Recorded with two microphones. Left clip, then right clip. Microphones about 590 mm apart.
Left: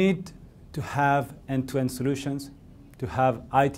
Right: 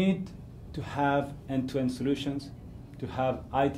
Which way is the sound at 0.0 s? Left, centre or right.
Left.